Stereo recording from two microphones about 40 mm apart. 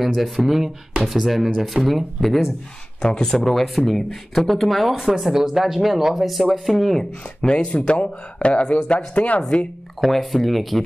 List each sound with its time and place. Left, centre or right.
0.1 s speech: centre
3.0 s speech: centre
4.9 s speech: centre
7.0 s speech: left
9.9 s speech: centre